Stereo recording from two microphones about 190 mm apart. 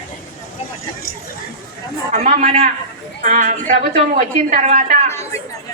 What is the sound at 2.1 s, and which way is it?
A woman's voice, 40° right (ahead or behind).